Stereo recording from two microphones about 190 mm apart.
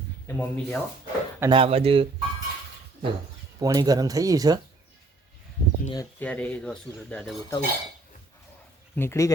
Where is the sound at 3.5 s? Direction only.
20° right (ahead or behind).